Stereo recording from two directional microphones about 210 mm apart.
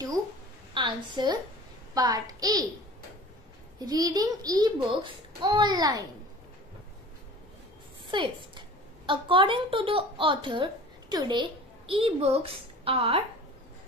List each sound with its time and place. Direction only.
0.7 s a child's voice: 20° right (ahead or behind)
3.8 s a child's voice: 20° right (ahead or behind)
8.1 s a woman's voice: 25° right (ahead or behind)